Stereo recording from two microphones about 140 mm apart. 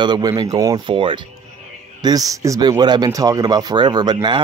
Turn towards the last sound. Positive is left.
turn(degrees=-30)  # may be behind; listen again after turning